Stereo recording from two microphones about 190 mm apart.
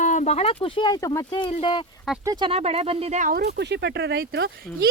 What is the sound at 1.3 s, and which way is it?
Speech, 30° left (ahead or behind).